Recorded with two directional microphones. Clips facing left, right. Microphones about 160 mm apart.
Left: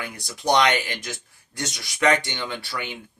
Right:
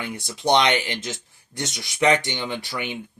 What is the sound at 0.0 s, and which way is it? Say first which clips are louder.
Speech: right 2 dB; 25° right (ahead or behind).